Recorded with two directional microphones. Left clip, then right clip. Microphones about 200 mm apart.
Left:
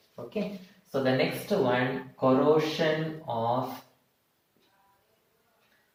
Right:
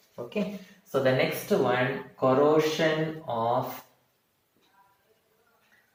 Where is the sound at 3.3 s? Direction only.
5° right (ahead or behind).